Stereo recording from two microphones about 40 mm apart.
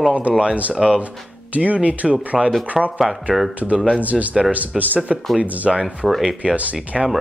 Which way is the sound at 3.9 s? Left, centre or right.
Right.